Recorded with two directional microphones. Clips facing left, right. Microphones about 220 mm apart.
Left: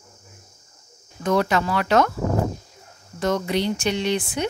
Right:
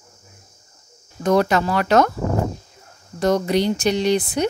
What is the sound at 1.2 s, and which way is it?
Speech, 40° right (ahead or behind).